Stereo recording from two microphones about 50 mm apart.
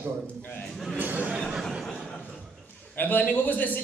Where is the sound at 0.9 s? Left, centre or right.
Right.